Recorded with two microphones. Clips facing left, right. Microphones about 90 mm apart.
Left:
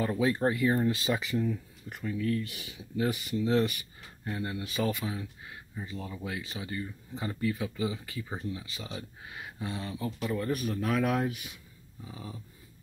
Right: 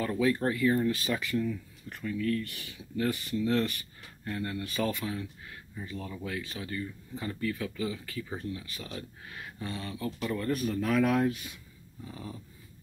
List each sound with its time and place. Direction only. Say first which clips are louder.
0.0 s speech: even; 25° left (ahead or behind); by 12.4 s 5° left (ahead or behind)